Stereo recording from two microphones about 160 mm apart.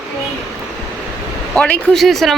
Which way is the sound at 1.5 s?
5° left (ahead or behind).